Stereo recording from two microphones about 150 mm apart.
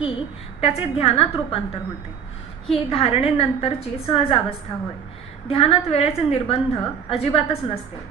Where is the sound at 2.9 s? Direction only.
40° left (ahead or behind).